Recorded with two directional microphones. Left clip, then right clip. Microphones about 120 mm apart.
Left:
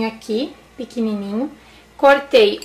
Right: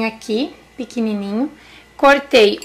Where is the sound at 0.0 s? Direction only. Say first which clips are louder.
Right 2 dB; 30° right (ahead or behind).